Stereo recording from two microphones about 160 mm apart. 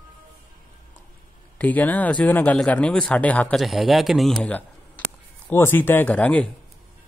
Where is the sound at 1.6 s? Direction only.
10° left (ahead or behind).